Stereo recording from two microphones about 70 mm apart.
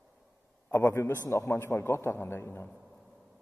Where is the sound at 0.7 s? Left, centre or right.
Left.